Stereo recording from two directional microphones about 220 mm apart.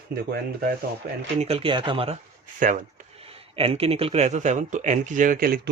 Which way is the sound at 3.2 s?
25° right (ahead or behind).